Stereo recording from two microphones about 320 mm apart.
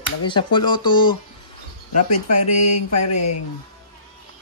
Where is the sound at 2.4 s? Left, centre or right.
Left.